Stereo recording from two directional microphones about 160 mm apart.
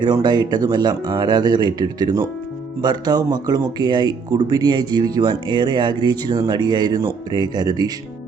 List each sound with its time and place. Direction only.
0.0 s speech: 25° right (ahead or behind)